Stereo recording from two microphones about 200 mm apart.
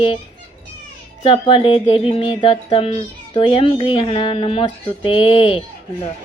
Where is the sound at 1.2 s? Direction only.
25° left (ahead or behind).